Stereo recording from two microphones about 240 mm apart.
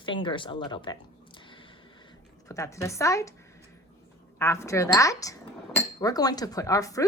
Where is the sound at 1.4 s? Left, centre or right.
Centre.